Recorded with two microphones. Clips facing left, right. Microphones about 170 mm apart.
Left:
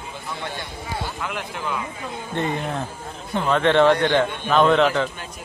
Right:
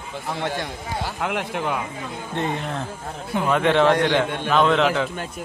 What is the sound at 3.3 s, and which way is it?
A man's voice, 10° right (ahead or behind).